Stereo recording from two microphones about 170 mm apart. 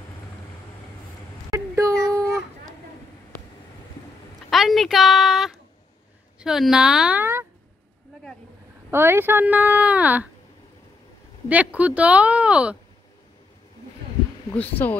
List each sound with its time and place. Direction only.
1.5 s a sound: 20° right (ahead or behind)
4.5 s a sound: centre (ahead or behind)
6.4 s speech: centre (ahead or behind)
8.9 s speech: 15° right (ahead or behind)
11.4 s speech: 10° right (ahead or behind)
14.5 s speech: 10° left (ahead or behind)